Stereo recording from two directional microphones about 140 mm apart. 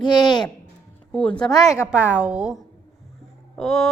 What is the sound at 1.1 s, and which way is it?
Speech, 10° left (ahead or behind).